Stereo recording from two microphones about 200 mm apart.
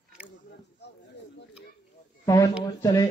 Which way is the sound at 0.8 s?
55° left (ahead or behind).